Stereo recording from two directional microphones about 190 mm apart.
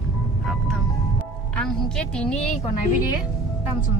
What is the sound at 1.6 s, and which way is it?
Speech, 5° left (ahead or behind).